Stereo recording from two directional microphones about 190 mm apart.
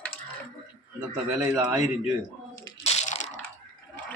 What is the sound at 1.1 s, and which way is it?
Speech, 10° right (ahead or behind).